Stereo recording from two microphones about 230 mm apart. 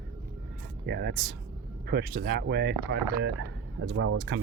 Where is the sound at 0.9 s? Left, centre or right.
Right.